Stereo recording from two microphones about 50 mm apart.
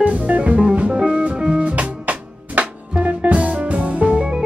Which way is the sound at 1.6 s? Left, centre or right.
Right.